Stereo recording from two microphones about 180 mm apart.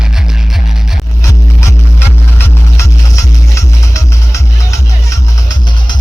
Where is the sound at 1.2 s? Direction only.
15° left (ahead or behind).